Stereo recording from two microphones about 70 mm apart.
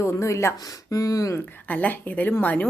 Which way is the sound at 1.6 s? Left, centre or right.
Left.